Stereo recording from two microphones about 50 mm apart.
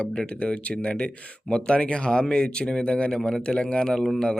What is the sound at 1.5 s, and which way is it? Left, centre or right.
A man's voice, left.